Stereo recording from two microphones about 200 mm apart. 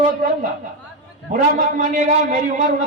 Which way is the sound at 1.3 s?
40° right (ahead or behind).